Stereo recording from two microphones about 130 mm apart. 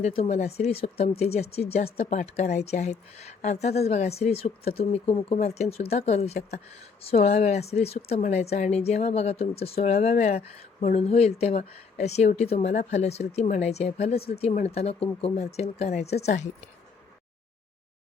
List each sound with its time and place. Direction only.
0.0 s speech: 55° left (ahead or behind)